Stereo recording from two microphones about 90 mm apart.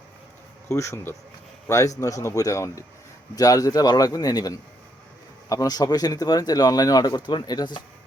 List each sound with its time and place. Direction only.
0.7 s speech: 30° left (ahead or behind); by 7.8 s 55° left (ahead or behind)